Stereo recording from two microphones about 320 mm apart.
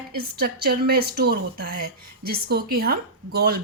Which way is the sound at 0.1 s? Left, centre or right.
Right.